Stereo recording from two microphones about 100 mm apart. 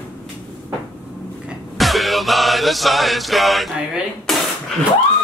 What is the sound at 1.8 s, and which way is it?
Music, centre (ahead or behind).